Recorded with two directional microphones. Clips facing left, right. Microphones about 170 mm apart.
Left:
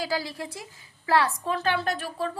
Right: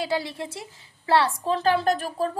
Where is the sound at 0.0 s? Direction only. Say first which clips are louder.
Right 3 dB; 25° right (ahead or behind).